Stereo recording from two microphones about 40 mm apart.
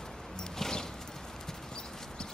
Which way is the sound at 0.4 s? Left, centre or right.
Centre.